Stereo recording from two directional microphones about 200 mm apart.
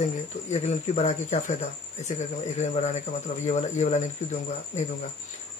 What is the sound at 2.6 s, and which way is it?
Speech, 35° left (ahead or behind).